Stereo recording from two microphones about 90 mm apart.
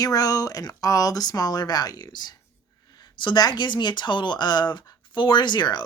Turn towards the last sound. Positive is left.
turn(degrees=55)  # may be behind; listen again after turning